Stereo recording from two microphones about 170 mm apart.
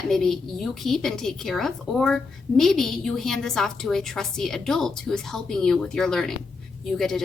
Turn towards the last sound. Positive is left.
turn(degrees=0)  # may be behind; listen again after turning